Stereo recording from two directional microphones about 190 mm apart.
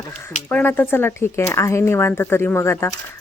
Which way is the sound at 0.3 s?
10° left (ahead or behind).